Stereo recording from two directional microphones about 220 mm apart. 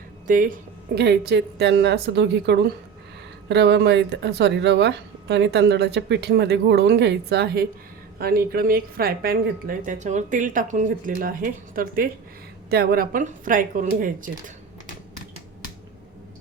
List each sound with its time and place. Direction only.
0.3 s a woman's voice: 40° right (ahead or behind)